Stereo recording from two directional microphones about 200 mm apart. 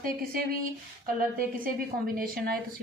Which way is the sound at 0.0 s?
45° right (ahead or behind).